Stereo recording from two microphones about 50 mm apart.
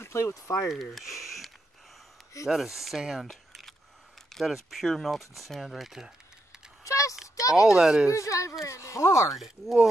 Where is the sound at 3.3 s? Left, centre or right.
Centre.